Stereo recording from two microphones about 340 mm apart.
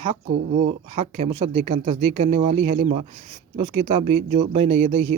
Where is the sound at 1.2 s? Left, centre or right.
Centre.